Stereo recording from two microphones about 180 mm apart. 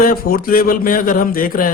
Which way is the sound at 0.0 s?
55° left (ahead or behind).